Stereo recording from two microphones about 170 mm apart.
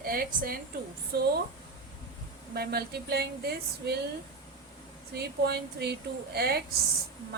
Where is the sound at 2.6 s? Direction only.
65° right (ahead or behind).